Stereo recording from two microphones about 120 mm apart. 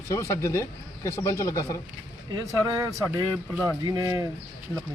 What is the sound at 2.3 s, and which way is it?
Speech, 30° right (ahead or behind).